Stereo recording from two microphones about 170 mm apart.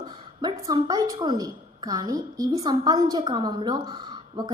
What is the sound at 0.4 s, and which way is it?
A woman's voice, 20° right (ahead or behind).